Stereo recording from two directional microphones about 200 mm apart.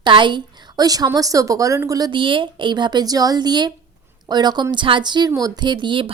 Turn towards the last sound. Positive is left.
turn(degrees=-25)  # may be behind; listen again after turning